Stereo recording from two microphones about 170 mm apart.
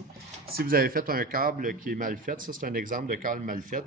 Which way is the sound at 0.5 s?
60° right (ahead or behind).